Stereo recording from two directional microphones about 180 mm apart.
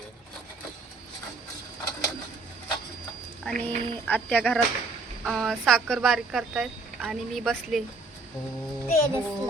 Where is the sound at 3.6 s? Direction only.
10° left (ahead or behind).